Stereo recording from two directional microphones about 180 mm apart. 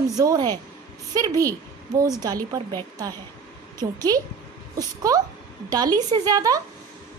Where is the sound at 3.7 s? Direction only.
20° right (ahead or behind).